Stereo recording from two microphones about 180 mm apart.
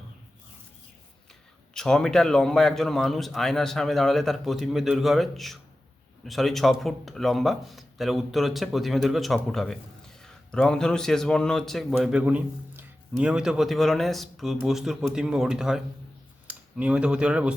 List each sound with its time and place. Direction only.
1.3 s a man's voice: 5° left (ahead or behind)